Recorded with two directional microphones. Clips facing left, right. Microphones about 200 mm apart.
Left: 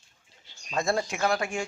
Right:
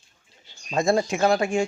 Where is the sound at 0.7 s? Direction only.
20° right (ahead or behind).